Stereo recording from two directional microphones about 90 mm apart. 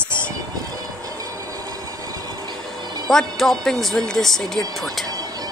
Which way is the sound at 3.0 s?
5° left (ahead or behind).